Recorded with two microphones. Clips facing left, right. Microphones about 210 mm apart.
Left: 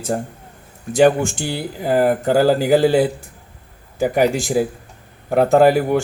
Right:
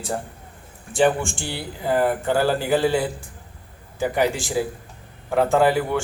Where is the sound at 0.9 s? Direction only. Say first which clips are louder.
Left 6 dB; 40° left (ahead or behind).